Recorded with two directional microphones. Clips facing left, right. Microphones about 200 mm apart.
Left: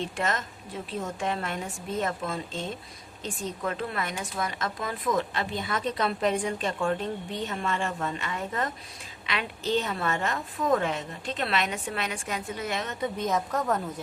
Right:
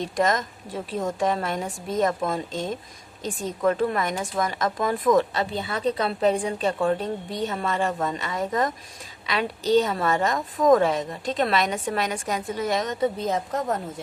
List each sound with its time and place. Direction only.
0.0 s a woman's voice: 40° right (ahead or behind)
5.6 s a woman's voice: 35° right (ahead or behind)